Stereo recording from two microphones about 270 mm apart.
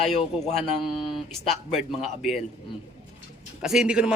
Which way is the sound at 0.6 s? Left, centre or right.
Centre.